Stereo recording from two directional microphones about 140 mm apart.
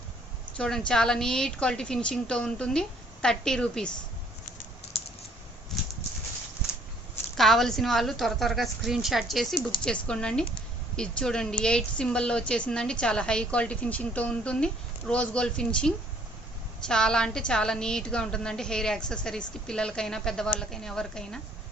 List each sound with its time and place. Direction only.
0.5 s a woman's voice: 5° left (ahead or behind)
4.9 s typing: 45° left (ahead or behind)
5.7 s horse: centre (ahead or behind)
7.3 s a woman's voice: centre (ahead or behind)